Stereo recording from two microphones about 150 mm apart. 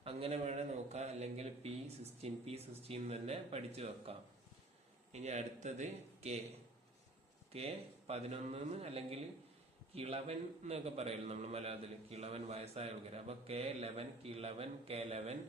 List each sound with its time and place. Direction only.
0.0 s a man's voice: 40° right (ahead or behind)
7.5 s a man's voice: 40° right (ahead or behind)